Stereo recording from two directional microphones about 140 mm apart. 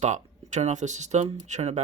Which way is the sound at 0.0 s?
55° right (ahead or behind).